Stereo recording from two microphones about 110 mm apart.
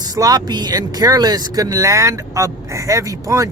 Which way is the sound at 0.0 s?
35° right (ahead or behind).